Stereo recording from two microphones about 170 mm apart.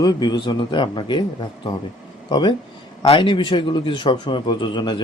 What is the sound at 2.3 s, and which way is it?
A man's voice, 25° left (ahead or behind).